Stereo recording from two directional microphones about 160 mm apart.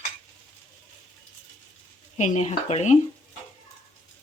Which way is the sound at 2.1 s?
45° left (ahead or behind).